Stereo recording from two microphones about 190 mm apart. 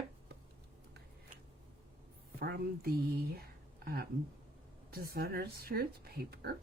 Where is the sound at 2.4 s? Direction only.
55° right (ahead or behind).